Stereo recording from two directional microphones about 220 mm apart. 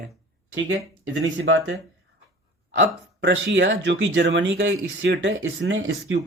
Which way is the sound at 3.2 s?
55° right (ahead or behind).